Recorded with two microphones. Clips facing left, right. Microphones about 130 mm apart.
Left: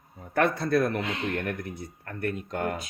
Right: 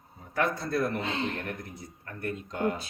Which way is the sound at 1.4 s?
70° left (ahead or behind).